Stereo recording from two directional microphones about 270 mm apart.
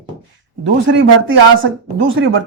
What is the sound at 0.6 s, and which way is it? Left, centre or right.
Speech, right.